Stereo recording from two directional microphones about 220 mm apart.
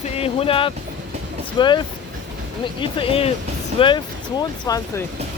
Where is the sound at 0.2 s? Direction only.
25° left (ahead or behind).